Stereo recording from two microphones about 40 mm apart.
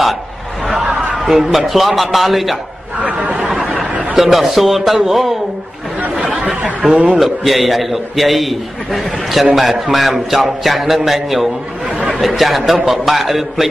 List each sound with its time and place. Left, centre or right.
1.2 s a man's voice: centre
3.0 s speech: right
4.2 s a man's voice: centre
6.9 s speech: right
7.2 s a man's voice: centre